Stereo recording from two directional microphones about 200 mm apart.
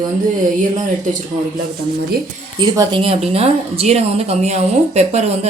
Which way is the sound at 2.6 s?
25° right (ahead or behind).